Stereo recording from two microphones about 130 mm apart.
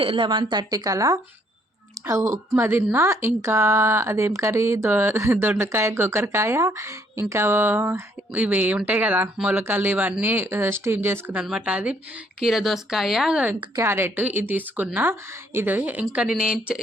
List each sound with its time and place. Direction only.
0.0 s a woman's voice: 40° right (ahead or behind); by 13.5 s 5° right (ahead or behind)
13.8 s a woman's voice: 20° right (ahead or behind)